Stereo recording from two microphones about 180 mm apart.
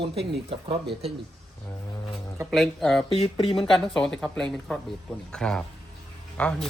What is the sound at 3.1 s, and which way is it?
Speech, 30° left (ahead or behind).